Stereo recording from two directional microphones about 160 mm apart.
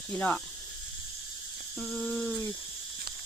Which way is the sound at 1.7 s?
Centre (ahead or behind).